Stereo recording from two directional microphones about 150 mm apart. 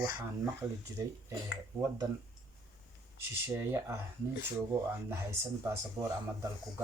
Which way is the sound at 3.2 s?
15° right (ahead or behind).